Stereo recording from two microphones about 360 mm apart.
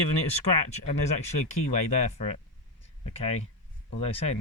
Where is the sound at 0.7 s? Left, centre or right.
Centre.